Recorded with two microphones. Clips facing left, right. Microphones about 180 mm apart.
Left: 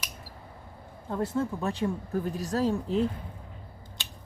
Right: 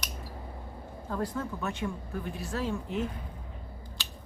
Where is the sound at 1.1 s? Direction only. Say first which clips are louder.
Left 4 dB; 25° left (ahead or behind).